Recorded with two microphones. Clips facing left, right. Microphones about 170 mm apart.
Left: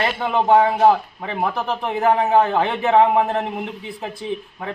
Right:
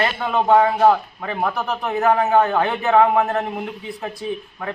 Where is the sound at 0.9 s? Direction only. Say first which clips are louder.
Even; 20° left (ahead or behind).